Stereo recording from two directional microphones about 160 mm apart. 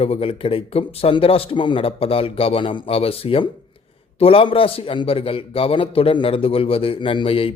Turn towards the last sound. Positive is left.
turn(degrees=35)  # may be behind; listen again after turning